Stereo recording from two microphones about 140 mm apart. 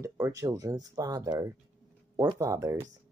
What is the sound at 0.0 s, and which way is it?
Speech, 25° right (ahead or behind).